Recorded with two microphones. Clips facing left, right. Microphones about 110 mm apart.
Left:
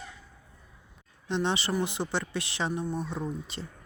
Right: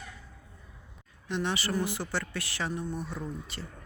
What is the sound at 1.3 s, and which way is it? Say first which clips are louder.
Speech: left 2 dB; 25° left (ahead or behind).